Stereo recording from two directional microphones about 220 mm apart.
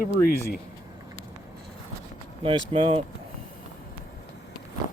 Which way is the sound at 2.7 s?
25° right (ahead or behind).